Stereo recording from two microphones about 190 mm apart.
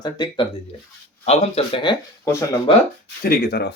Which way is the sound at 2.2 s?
15° left (ahead or behind).